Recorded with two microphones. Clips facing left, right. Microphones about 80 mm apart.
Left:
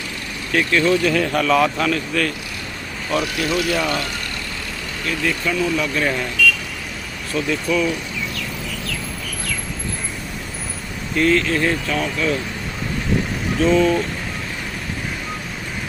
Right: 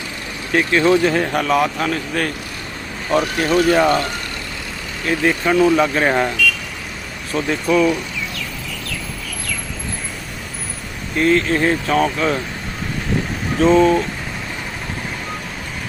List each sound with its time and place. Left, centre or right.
0.5 s speech: right
3.1 s speech: right
7.3 s speech: right
11.2 s speech: right
11.9 s speech: right
13.6 s speech: right